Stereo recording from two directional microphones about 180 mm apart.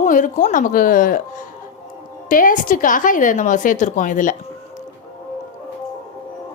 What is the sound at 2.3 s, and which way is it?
A woman's voice, 50° left (ahead or behind).